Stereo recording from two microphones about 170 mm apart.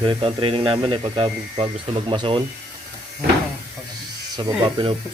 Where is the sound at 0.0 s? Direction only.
30° right (ahead or behind).